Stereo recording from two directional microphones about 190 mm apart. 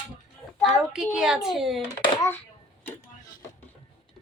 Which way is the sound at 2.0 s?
15° left (ahead or behind).